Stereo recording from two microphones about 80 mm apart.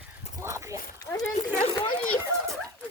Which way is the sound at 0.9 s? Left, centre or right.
Left.